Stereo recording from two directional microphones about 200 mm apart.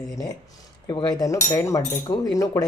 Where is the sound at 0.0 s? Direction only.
15° left (ahead or behind).